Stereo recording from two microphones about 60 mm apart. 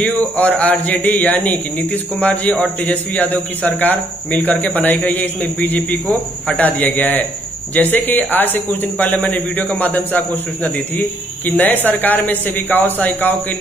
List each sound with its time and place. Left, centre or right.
0.0 s a man's voice: left